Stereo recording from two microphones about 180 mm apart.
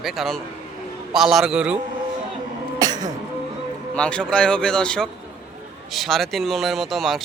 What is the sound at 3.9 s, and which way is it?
Speech, 5° left (ahead or behind).